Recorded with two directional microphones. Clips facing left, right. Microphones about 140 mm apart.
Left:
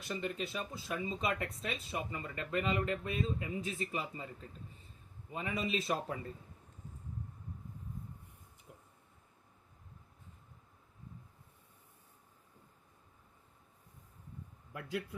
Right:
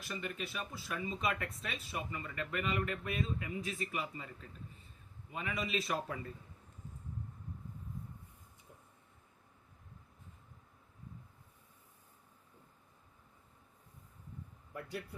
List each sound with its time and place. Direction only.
0.1 s speech: 25° left (ahead or behind)
5.3 s speech: 30° left (ahead or behind)
14.7 s a sound: 90° left